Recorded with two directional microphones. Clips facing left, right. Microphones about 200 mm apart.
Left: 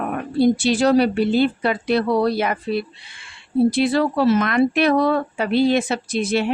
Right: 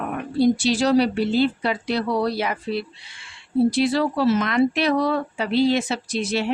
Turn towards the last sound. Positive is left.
turn(degrees=55)  # may be behind; listen again after turning